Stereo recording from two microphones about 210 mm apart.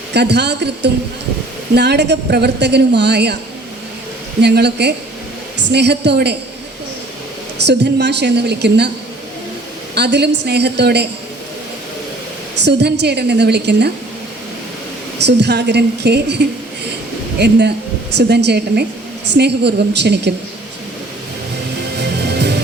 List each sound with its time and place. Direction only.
0.1 s a woman's voice: 55° right (ahead or behind)
4.4 s a woman's voice: 55° right (ahead or behind)
7.7 s a woman's voice: 55° right (ahead or behind)
9.9 s a woman's voice: 55° right (ahead or behind)
12.6 s a woman's voice: 55° right (ahead or behind)
15.2 s a woman's voice: 55° right (ahead or behind)
17.4 s a woman's voice: 55° right (ahead or behind)
21.9 s music: 50° right (ahead or behind)